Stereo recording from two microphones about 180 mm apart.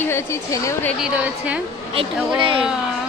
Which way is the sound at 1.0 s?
5° right (ahead or behind).